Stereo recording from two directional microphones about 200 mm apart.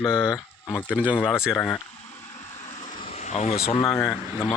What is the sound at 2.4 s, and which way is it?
Vehicle, 35° left (ahead or behind).